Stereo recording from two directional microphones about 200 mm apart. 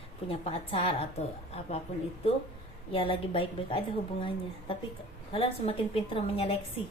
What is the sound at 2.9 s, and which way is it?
Speech, 25° left (ahead or behind).